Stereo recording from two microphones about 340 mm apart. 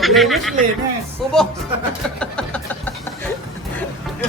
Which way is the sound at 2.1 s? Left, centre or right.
Centre.